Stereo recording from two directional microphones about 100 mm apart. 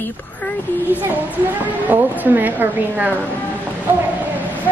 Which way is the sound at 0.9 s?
20° right (ahead or behind).